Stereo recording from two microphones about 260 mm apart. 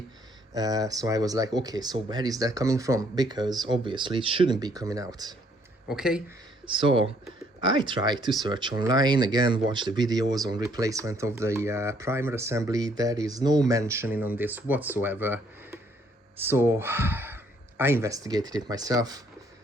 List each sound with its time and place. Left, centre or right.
0.5 s speech: centre
5.9 s speech: centre
6.7 s speech: centre